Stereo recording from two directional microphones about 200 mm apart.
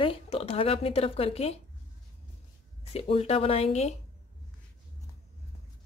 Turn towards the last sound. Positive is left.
turn(degrees=35)  # may be behind; listen again after turning